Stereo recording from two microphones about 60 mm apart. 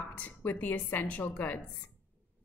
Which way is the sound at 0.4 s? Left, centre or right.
Left.